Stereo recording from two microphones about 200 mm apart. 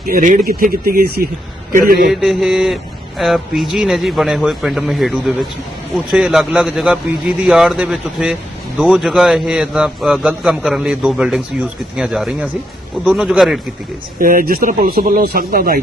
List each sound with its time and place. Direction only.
0.0 s speech: 45° right (ahead or behind)
2.0 s a man's voice: centre (ahead or behind)
14.2 s speech: 45° right (ahead or behind)